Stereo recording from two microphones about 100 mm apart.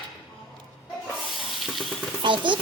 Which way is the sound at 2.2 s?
55° right (ahead or behind).